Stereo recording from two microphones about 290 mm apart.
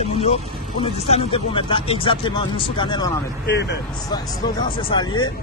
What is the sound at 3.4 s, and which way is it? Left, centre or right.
Speech, left.